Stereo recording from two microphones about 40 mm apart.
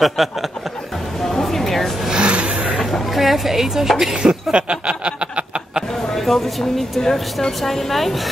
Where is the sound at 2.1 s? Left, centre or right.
Right.